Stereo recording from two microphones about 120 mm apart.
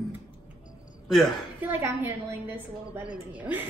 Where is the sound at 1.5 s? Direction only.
15° right (ahead or behind).